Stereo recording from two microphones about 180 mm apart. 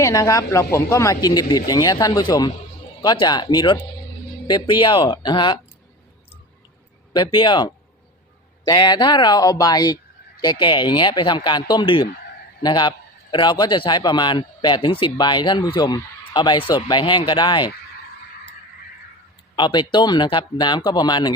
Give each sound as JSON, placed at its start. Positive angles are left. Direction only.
{"t": 0.0, "sound": "a man's voice", "side_deg": 20}
{"t": 7.1, "sound": "a man's voice", "side_deg": 25}
{"t": 19.5, "sound": "a man's voice", "side_deg": 25}